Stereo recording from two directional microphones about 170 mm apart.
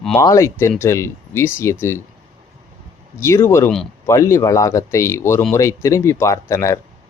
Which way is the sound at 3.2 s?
15° left (ahead or behind).